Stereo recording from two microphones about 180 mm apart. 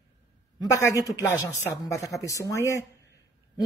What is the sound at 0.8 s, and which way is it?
A woman's voice, 20° left (ahead or behind).